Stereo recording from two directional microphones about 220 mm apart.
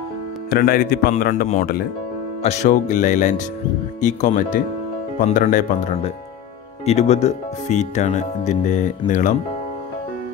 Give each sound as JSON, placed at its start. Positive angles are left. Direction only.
{"t": 0.5, "sound": "speech", "side_deg": 45}